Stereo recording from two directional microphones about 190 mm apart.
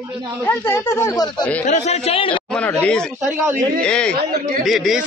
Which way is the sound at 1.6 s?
35° left (ahead or behind).